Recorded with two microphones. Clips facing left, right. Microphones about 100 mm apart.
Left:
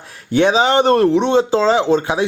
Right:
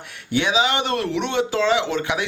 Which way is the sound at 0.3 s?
40° left (ahead or behind).